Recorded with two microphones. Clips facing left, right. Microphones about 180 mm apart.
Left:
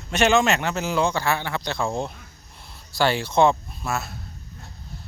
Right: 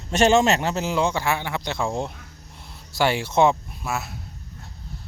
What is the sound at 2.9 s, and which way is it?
Speech, 20° right (ahead or behind).